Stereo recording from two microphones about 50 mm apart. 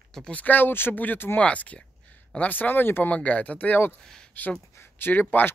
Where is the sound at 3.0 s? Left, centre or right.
Left.